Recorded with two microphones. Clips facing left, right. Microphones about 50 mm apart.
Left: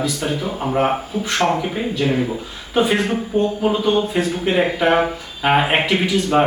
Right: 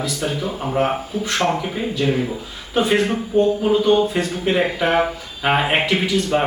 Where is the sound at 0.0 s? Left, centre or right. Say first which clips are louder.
Left 1 dB; centre.